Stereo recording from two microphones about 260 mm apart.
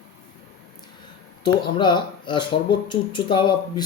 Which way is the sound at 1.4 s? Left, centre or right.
Centre.